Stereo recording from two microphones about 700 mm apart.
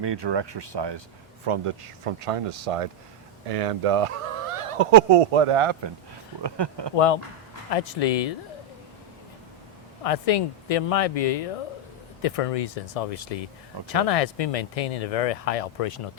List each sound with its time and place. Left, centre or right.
0.0 s speech: right
6.9 s speech: left
10.0 s speech: left